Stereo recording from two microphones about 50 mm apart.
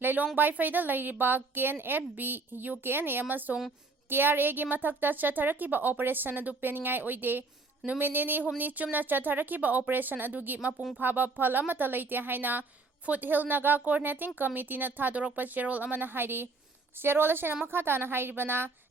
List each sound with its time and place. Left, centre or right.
0.0 s a woman's voice: right